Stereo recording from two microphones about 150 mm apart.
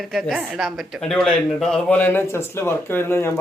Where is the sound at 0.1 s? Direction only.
Centre (ahead or behind).